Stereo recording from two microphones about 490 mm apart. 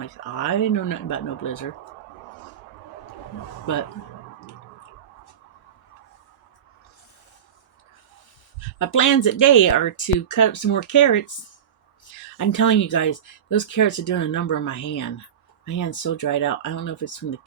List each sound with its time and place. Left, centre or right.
0.0 s speech: left
8.8 s speech: left